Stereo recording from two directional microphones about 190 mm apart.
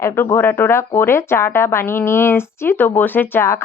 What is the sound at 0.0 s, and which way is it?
Speech, 15° left (ahead or behind).